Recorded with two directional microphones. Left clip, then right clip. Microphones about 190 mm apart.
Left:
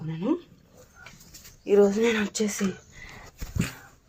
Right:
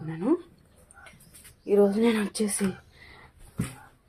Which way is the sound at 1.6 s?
20° left (ahead or behind).